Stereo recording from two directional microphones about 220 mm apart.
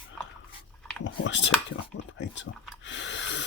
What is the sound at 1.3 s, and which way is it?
Speech, 55° left (ahead or behind).